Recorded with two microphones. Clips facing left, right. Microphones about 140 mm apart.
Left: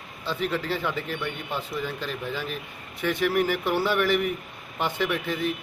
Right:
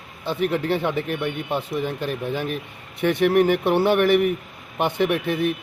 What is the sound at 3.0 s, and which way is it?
Speech, 60° right (ahead or behind).